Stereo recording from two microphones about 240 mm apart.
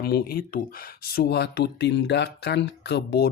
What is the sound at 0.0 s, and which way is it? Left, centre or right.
Speech, left.